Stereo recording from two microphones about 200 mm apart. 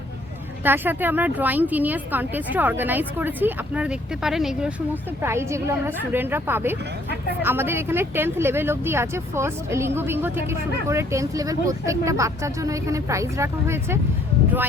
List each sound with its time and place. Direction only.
0.6 s speech: 10° right (ahead or behind)
5.2 s speech: 15° right (ahead or behind)